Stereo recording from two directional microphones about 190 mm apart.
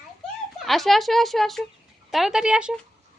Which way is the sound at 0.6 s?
Centre (ahead or behind).